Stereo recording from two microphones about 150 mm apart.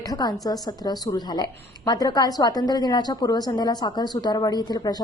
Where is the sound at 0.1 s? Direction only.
25° left (ahead or behind).